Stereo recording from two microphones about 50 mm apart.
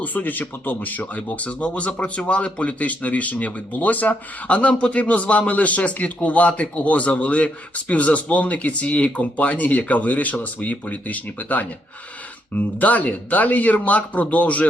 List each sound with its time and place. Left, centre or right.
0.0 s a man's voice: left